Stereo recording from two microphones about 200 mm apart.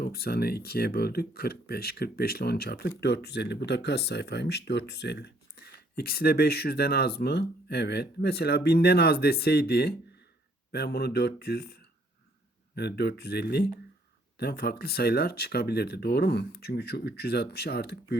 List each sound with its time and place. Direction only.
0.0 s speech: 50° left (ahead or behind)